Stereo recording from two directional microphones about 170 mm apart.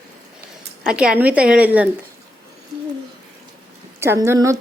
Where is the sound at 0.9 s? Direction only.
5° right (ahead or behind).